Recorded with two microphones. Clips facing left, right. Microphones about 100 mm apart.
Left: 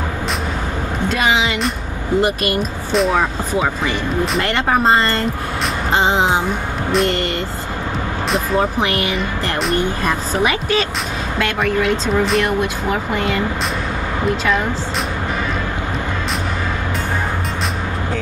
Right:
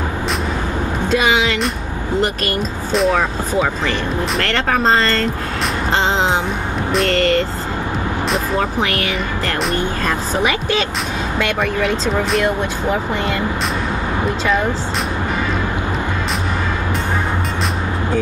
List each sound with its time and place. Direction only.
2.2 s speech: 15° left (ahead or behind)
2.9 s speech: centre (ahead or behind)
4.4 s speech: 15° left (ahead or behind)
8.5 s speech: 20° left (ahead or behind)